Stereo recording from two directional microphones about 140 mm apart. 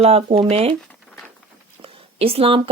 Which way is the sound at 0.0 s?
45° right (ahead or behind).